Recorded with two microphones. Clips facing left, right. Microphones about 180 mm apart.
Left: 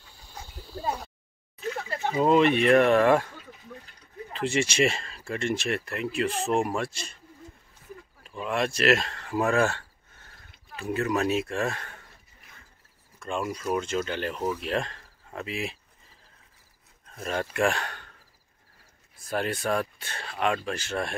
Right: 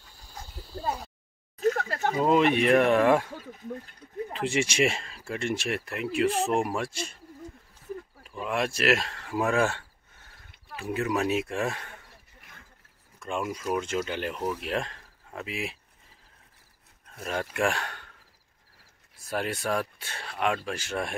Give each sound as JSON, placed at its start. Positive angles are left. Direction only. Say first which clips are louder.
{"t": 0.4, "sound": "a sound", "louder": "left 1 dB", "side_deg": 0}
{"t": 1.6, "sound": "a sound", "louder": "right 5 dB", "side_deg": -45}
{"t": 2.2, "sound": "speech", "louder": "left 2 dB", "side_deg": -5}
{"t": 4.3, "sound": "speech", "louder": "left 2 dB", "side_deg": -10}
{"t": 8.2, "sound": "speech", "louder": "left 2 dB", "side_deg": -10}
{"t": 13.2, "sound": "speech", "louder": "left 1 dB", "side_deg": -10}
{"t": 17.1, "sound": "speech", "louder": "left 2 dB", "side_deg": -5}
{"t": 19.2, "sound": "speech", "louder": "left 2 dB", "side_deg": -5}